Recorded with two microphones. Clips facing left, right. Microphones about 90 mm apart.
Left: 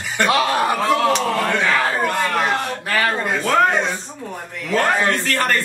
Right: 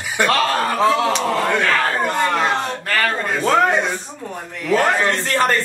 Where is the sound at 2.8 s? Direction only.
10° left (ahead or behind).